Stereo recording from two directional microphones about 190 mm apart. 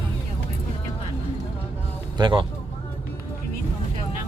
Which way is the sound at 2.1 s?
25° right (ahead or behind).